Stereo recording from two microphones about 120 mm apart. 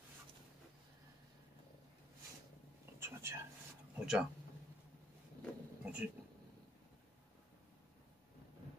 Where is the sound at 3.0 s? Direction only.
20° right (ahead or behind).